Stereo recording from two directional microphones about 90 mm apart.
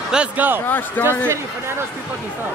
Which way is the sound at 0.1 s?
10° right (ahead or behind).